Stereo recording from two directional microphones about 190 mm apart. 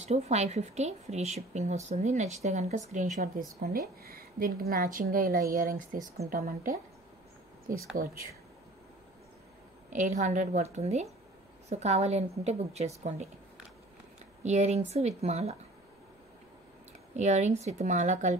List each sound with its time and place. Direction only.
0.0 s a woman's voice: 35° right (ahead or behind)
8.0 s speech: 45° right (ahead or behind)
9.8 s a woman's voice: 40° right (ahead or behind)
14.4 s a woman's voice: 35° right (ahead or behind)
17.1 s a woman's voice: 35° right (ahead or behind)